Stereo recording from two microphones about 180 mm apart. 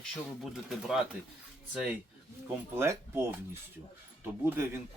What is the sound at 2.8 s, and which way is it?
Speech, 15° right (ahead or behind).